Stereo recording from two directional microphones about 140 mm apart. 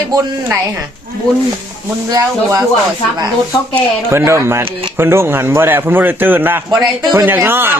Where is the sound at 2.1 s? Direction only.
25° right (ahead or behind).